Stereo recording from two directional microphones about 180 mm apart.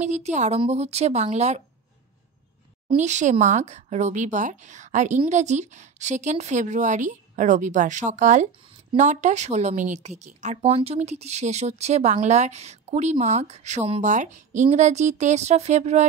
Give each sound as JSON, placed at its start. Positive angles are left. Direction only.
{"t": 0.0, "sound": "a woman's voice", "side_deg": -40}
{"t": 2.9, "sound": "a woman's voice", "side_deg": -40}